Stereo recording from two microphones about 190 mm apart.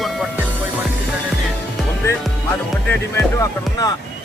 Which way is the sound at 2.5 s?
10° left (ahead or behind).